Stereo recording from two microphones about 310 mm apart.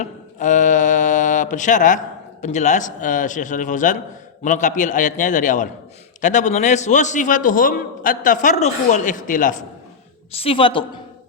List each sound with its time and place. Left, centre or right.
0.0 s a man's voice: left